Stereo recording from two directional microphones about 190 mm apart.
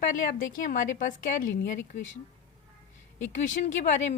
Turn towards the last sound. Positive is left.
turn(degrees=40)  # may be behind; listen again after turning